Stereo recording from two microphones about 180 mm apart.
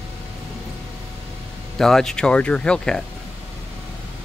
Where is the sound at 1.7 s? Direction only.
Centre (ahead or behind).